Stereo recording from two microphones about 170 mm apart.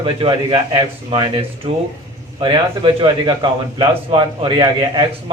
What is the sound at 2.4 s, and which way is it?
A man's voice, 30° right (ahead or behind).